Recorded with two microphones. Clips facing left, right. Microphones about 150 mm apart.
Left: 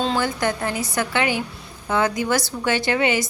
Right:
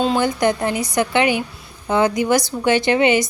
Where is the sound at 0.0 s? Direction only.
15° right (ahead or behind).